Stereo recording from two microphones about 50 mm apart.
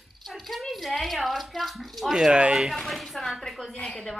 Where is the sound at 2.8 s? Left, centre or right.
Centre.